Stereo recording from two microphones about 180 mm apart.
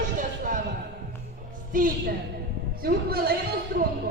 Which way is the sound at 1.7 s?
50° right (ahead or behind).